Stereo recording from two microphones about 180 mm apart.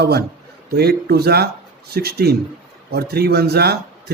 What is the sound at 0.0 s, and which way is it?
A man's voice, 65° right (ahead or behind).